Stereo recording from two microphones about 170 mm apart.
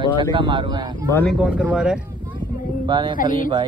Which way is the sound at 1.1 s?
10° left (ahead or behind).